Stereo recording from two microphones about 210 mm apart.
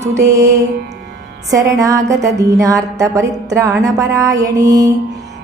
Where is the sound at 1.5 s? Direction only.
15° right (ahead or behind).